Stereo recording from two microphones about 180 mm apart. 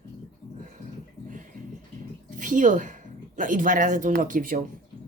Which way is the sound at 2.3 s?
45° right (ahead or behind).